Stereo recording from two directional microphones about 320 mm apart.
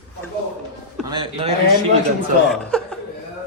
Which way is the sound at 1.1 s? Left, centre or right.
Centre.